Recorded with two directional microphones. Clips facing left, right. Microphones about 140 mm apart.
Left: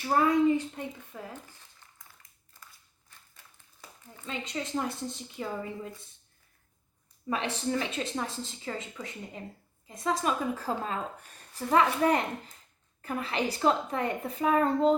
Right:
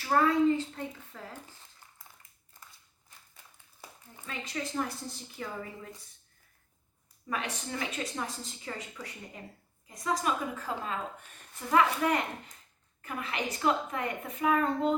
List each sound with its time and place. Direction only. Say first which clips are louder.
0.0 s a woman's voice: left 1 dB; 15° left (ahead or behind)
4.3 s a woman's voice: left 3 dB; 20° left (ahead or behind)
7.3 s a woman's voice: left 5 dB; 30° left (ahead or behind)